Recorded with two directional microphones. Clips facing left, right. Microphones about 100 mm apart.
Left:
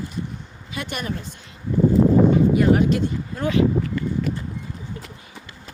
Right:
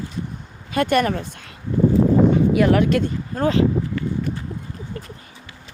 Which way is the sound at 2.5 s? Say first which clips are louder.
Right 1 dB; 75° right (ahead or behind).